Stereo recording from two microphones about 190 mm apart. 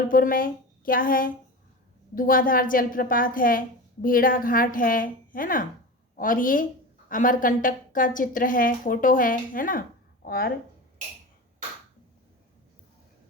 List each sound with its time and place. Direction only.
0.1 s a woman's voice: 45° left (ahead or behind)